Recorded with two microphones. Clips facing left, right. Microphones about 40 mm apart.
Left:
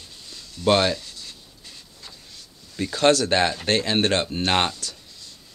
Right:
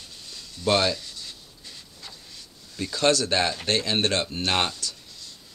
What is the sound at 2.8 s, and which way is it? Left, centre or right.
Speech, left.